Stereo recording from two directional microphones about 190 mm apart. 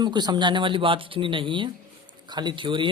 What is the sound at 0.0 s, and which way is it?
Speech, 20° right (ahead or behind).